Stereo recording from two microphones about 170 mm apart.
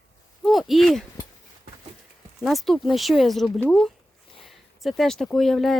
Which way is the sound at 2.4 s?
Centre (ahead or behind).